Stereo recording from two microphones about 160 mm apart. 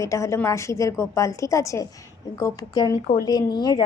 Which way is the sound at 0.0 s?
20° left (ahead or behind).